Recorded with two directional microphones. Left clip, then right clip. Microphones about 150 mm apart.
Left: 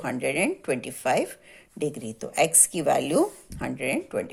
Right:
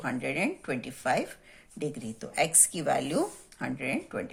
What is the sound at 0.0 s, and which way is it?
A woman's voice, 50° left (ahead or behind).